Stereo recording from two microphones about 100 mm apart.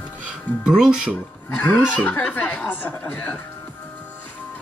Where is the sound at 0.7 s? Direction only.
5° right (ahead or behind).